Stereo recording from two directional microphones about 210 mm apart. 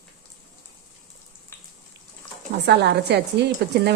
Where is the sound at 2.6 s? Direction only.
55° right (ahead or behind).